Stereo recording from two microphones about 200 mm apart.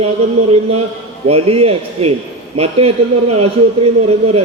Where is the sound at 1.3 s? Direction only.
30° right (ahead or behind).